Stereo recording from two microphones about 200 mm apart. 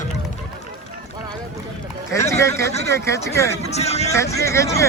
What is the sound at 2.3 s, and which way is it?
Speech, 15° left (ahead or behind).